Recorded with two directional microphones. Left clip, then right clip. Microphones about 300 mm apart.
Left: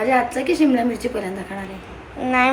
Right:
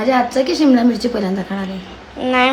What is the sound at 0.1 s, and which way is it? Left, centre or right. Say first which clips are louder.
Speech: right 6 dB; right.